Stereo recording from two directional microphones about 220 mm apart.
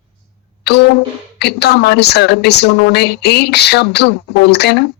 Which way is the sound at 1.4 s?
50° left (ahead or behind).